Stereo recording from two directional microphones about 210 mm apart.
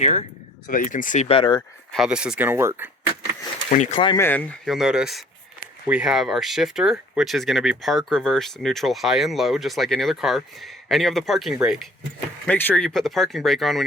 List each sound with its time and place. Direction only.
0.0 s speech: 35° left (ahead or behind)
1.9 s speech: centre (ahead or behind)
3.7 s speech: 35° left (ahead or behind)
4.2 s speech: 10° left (ahead or behind)